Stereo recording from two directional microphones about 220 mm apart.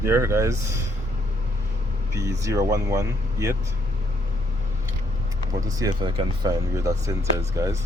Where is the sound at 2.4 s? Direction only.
15° right (ahead or behind).